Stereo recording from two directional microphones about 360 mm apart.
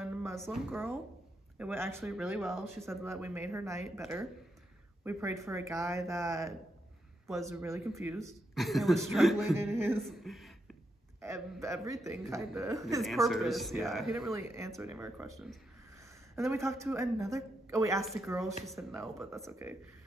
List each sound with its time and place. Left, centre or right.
0.0 s music: centre
1.6 s a woman's voice: centre